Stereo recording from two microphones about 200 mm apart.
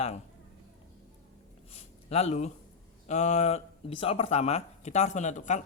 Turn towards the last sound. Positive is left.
turn(degrees=35)  # may be behind; listen again after turning